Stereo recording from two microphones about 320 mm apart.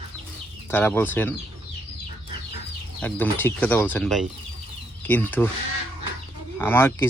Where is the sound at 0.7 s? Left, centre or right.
Centre.